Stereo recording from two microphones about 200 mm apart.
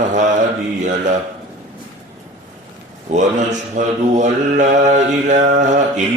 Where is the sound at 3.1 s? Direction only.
35° right (ahead or behind).